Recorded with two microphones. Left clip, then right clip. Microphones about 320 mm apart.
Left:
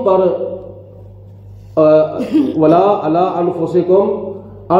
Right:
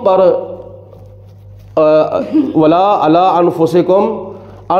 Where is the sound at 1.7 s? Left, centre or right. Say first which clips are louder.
Right 1 dB; right.